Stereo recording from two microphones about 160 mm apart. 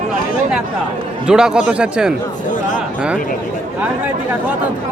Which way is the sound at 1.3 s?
5° right (ahead or behind).